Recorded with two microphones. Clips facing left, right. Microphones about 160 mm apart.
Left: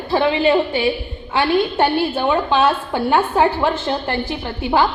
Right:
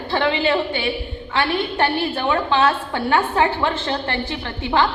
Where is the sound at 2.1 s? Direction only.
20° left (ahead or behind).